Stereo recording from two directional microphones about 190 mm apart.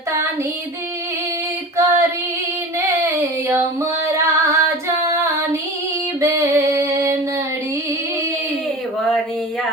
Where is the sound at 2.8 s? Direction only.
15° right (ahead or behind).